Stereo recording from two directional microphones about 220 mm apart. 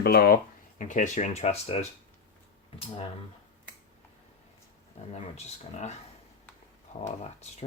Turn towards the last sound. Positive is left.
turn(degrees=30)  # may be behind; listen again after turning